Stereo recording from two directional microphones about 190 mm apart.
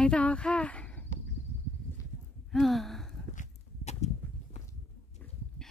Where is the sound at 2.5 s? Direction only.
Centre (ahead or behind).